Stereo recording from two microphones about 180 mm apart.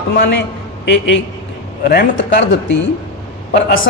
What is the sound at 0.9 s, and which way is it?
Speech, 90° left.